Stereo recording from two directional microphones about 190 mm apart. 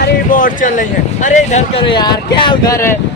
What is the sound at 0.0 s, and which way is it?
Speech, 45° left (ahead or behind).